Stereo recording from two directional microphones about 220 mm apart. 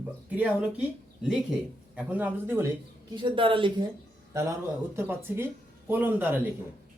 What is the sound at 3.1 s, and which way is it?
Speech, 25° right (ahead or behind).